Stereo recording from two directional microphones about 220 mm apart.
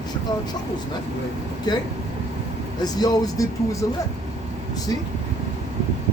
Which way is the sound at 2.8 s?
15° left (ahead or behind).